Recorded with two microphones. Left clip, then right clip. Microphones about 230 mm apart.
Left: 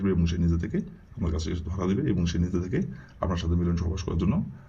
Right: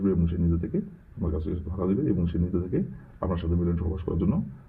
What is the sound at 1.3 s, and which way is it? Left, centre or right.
A man's voice, left.